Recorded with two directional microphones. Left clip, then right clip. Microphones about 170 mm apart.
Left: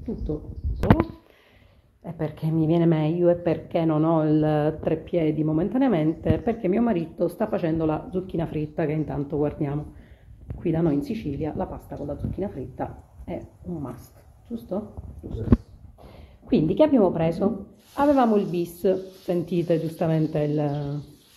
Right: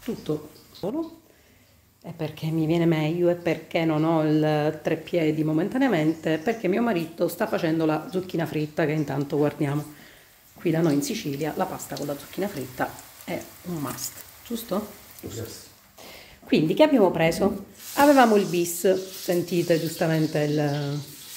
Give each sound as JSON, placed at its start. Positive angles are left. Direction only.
{"t": 0.3, "sound": "speech", "side_deg": -20}
{"t": 2.0, "sound": "a woman's voice", "side_deg": -5}
{"t": 14.5, "sound": "speech", "side_deg": -35}
{"t": 16.4, "sound": "a woman's voice", "side_deg": -15}
{"t": 17.9, "sound": "speech", "side_deg": -35}